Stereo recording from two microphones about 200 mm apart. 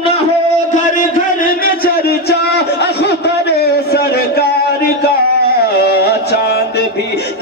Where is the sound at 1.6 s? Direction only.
50° left (ahead or behind).